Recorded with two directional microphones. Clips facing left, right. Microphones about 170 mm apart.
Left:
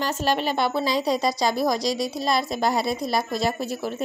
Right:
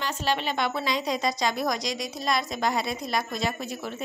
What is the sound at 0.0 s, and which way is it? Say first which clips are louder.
A woman's voice: left 4 dB; 40° left (ahead or behind).